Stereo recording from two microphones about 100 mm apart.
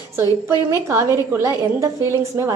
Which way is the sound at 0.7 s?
30° right (ahead or behind).